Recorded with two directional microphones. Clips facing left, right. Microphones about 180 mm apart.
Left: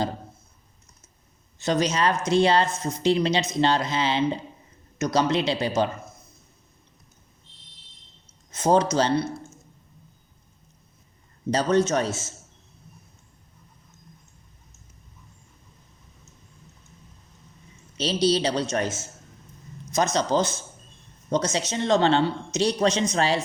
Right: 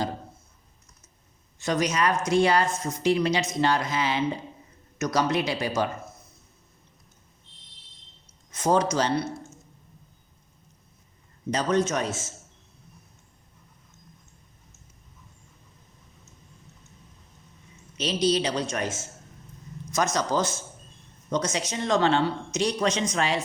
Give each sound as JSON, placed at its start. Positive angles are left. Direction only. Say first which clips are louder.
{"t": 1.6, "sound": "speech", "louder": "left 2 dB", "side_deg": 25}
{"t": 8.6, "sound": "speech", "louder": "left 3 dB", "side_deg": 25}
{"t": 11.5, "sound": "speech", "louder": "left 3 dB", "side_deg": 30}
{"t": 17.9, "sound": "a woman's voice", "louder": "left 2 dB", "side_deg": 30}
{"t": 19.9, "sound": "a woman's voice", "louder": "left 3 dB", "side_deg": 25}